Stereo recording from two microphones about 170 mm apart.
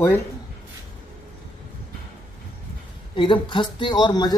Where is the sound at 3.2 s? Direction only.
30° left (ahead or behind).